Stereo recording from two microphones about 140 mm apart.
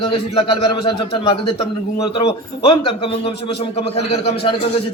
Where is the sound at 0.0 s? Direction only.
40° left (ahead or behind).